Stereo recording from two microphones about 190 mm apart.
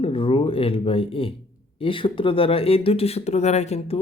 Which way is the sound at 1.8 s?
25° left (ahead or behind).